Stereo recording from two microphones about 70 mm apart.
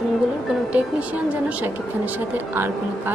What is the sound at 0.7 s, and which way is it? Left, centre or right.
A woman's voice, right.